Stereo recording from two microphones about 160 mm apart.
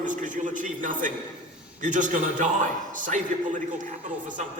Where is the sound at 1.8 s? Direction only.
55° right (ahead or behind).